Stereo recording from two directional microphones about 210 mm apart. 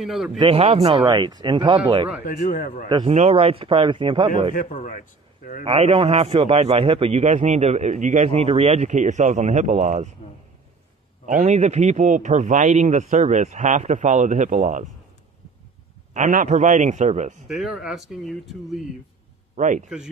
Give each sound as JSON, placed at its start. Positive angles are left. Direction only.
{"t": 0.0, "sound": "speech", "side_deg": 0}
{"t": 0.4, "sound": "speech", "side_deg": -25}
{"t": 2.2, "sound": "speech", "side_deg": 40}
{"t": 3.1, "sound": "speech", "side_deg": -30}
{"t": 4.6, "sound": "a man's voice", "side_deg": 35}
{"t": 5.6, "sound": "a man's voice", "side_deg": -25}
{"t": 11.2, "sound": "a man's voice", "side_deg": -35}
{"t": 16.1, "sound": "a man's voice", "side_deg": -35}
{"t": 17.5, "sound": "speech", "side_deg": 0}
{"t": 19.5, "sound": "a man's voice", "side_deg": -35}